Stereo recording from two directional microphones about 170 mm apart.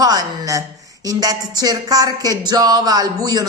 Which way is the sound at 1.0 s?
25° right (ahead or behind).